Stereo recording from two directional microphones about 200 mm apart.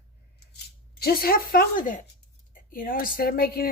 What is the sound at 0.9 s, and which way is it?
Speech, 50° left (ahead or behind).